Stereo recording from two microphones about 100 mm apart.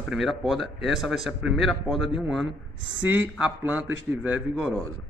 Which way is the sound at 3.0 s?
15° right (ahead or behind).